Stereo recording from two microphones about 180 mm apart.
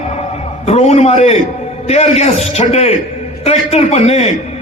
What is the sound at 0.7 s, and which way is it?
A man's voice, 35° left (ahead or behind).